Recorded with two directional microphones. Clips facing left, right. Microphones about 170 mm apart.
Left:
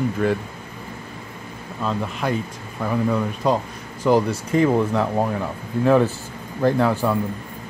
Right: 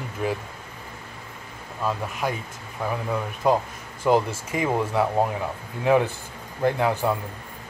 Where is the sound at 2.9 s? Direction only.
5° right (ahead or behind).